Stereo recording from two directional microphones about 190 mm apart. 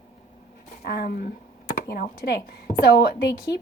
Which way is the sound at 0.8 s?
55° left (ahead or behind).